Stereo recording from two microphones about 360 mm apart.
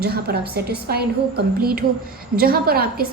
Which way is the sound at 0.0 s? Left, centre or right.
Right.